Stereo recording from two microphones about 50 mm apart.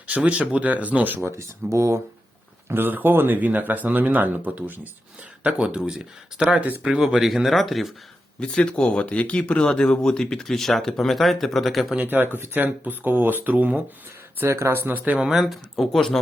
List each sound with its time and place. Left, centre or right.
0.1 s speech: right
1.2 s speech: right
2.6 s speech: right
5.4 s speech: right
6.5 s speech: right
6.8 s speech: centre
8.4 s speech: centre
12.0 s speech: right
14.4 s speech: right
14.8 s speech: right
15.7 s speech: centre